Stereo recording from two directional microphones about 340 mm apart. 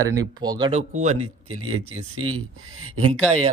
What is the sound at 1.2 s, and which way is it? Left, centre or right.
Speech, right.